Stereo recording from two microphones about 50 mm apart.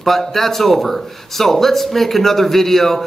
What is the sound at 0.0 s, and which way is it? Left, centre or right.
Speech, centre.